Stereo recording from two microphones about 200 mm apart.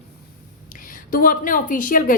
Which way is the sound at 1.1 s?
45° left (ahead or behind).